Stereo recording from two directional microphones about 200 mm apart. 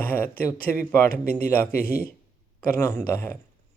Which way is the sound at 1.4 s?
10° left (ahead or behind).